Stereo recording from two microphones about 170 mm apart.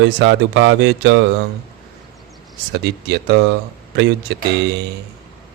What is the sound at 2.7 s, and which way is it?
A man's voice, 85° right.